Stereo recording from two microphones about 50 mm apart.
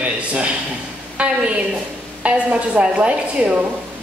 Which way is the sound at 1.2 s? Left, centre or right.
Right.